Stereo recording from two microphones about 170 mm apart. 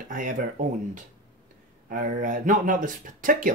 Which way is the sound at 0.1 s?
50° right (ahead or behind).